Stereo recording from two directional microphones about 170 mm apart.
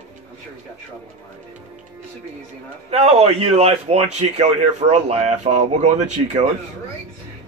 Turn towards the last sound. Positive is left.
turn(degrees=-40)  # may be behind; listen again after turning